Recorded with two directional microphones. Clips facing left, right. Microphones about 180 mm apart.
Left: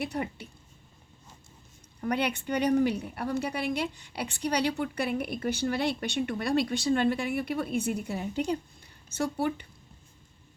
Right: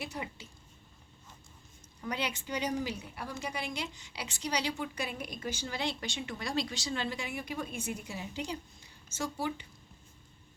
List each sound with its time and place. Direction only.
0.0 s a woman's voice: 60° left (ahead or behind)
2.0 s a woman's voice: 60° left (ahead or behind)